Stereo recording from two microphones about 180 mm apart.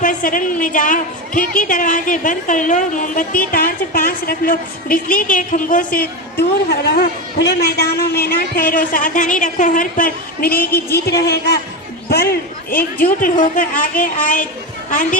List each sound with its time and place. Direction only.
0.0 s a woman's voice: 50° left (ahead or behind)
6.8 s a man's voice: 65° left (ahead or behind)
10.9 s a man's voice: 65° left (ahead or behind); by 14.4 s 45° left (ahead or behind)